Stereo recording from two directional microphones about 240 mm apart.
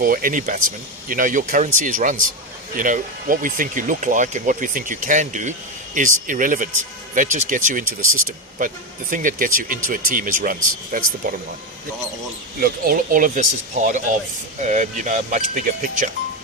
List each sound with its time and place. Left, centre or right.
0.0 s speech: right
12.5 s speech: right